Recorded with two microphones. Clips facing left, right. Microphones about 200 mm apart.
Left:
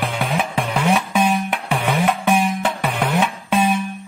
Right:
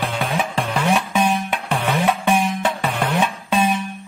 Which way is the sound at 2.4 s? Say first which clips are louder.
Left 1 dB; 15° left (ahead or behind).